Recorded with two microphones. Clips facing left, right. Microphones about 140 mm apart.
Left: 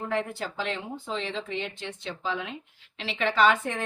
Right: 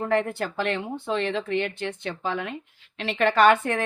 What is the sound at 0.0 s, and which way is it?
Speech, 65° right (ahead or behind).